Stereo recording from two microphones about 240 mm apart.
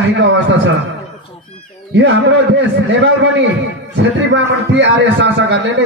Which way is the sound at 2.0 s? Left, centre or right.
Right.